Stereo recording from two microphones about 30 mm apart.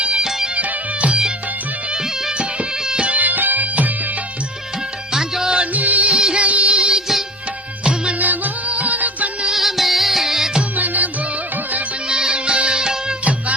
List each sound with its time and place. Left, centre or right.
0.0 s music: right
0.3 s music: centre
0.5 s music: right
3.2 s music: right
5.1 s music: right
5.7 s music: right
6.1 s music: right
6.4 s music: right
6.7 s music: right
8.2 s music: right
9.6 s music: centre
10.2 s music: centre
10.8 s music: right
12.0 s music: right